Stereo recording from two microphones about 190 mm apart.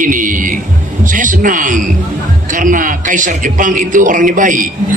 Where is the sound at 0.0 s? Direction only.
45° right (ahead or behind).